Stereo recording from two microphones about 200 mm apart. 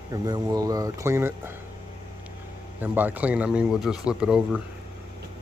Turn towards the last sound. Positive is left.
turn(degrees=-5)  # may be behind; listen again after turning